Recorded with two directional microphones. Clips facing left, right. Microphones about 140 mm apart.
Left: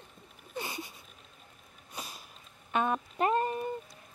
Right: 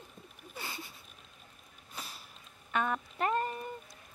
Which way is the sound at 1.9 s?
15° left (ahead or behind).